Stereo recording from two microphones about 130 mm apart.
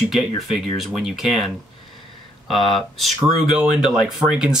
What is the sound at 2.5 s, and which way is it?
Speech, centre (ahead or behind).